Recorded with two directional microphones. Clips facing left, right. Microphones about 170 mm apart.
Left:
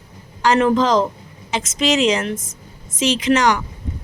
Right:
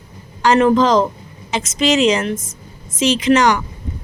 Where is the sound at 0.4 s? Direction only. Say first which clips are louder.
Right 3 dB; 30° right (ahead or behind).